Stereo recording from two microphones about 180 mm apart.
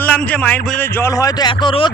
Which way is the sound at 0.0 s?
10° left (ahead or behind).